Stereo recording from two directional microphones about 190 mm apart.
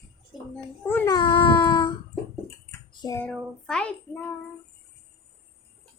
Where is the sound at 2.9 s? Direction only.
20° left (ahead or behind).